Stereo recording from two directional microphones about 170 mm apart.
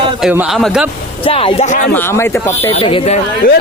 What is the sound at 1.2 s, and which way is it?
Speech, 30° left (ahead or behind).